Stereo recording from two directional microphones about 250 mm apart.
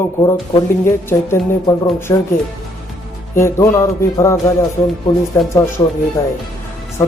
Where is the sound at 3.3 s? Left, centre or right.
Centre.